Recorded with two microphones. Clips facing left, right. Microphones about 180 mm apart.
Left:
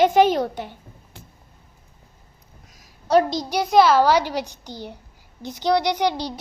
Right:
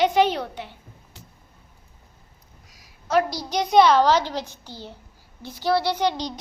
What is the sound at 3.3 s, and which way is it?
A child's voice, 15° left (ahead or behind).